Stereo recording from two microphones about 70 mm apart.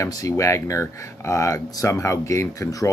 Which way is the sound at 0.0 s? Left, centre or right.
Left.